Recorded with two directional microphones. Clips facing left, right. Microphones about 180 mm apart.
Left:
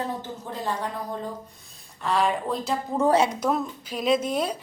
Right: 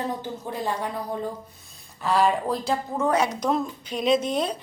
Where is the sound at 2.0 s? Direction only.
Centre (ahead or behind).